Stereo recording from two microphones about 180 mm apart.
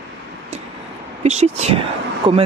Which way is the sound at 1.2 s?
40° right (ahead or behind).